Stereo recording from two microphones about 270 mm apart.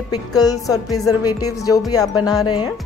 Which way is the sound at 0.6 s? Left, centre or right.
Centre.